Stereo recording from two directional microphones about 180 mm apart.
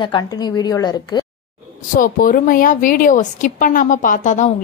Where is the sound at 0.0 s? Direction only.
25° left (ahead or behind).